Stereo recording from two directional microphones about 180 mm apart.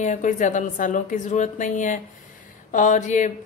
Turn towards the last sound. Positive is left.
turn(degrees=45)  # may be behind; listen again after turning